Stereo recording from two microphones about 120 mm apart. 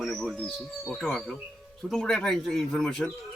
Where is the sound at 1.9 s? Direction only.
5° left (ahead or behind).